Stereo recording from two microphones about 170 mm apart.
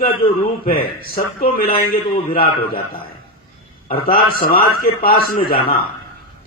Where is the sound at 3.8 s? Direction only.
60° left (ahead or behind).